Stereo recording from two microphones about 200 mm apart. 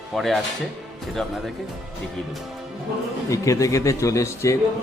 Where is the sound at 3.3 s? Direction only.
15° left (ahead or behind).